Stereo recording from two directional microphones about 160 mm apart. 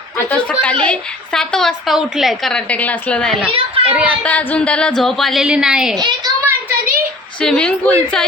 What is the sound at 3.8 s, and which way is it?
Speech, 10° right (ahead or behind).